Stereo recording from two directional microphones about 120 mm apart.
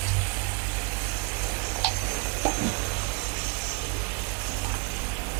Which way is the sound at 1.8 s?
20° right (ahead or behind).